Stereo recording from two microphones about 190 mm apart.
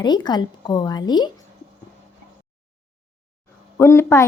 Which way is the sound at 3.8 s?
15° left (ahead or behind).